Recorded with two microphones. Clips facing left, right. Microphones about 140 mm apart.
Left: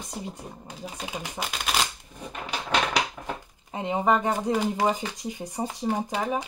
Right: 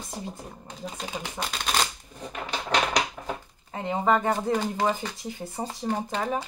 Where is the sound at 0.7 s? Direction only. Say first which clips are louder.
Right 1 dB; 5° left (ahead or behind).